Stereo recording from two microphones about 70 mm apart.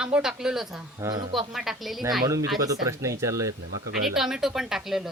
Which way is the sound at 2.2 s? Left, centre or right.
Right.